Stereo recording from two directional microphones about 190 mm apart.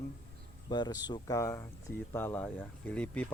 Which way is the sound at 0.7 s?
20° left (ahead or behind).